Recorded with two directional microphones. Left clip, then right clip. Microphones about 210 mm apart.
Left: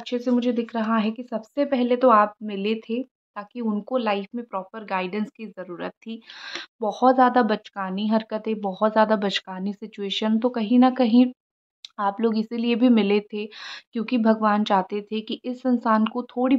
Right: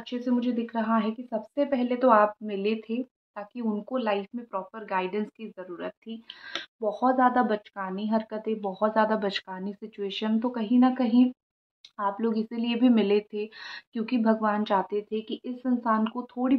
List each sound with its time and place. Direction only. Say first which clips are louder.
0.0 s a woman's voice: left 6 dB; 40° left (ahead or behind)